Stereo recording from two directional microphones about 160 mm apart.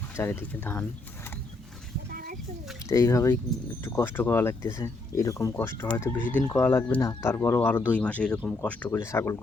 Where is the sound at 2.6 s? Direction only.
Centre (ahead or behind).